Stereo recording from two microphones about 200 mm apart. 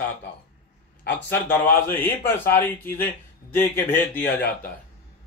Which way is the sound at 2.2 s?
10° left (ahead or behind).